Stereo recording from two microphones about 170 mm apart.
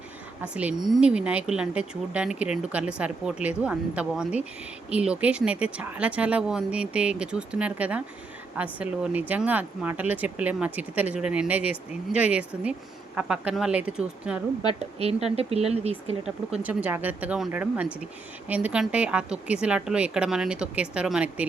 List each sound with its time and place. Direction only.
0.4 s speech: 5° right (ahead or behind)
14.8 s speech: 35° right (ahead or behind)
16.6 s speech: 10° right (ahead or behind)